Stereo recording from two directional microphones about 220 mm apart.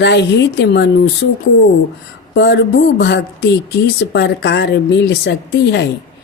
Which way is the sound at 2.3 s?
50° left (ahead or behind).